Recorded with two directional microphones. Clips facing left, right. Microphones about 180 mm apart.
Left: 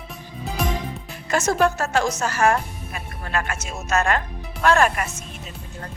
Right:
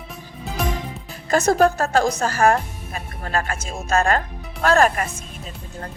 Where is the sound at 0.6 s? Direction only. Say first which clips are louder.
Right 1 dB; centre (ahead or behind).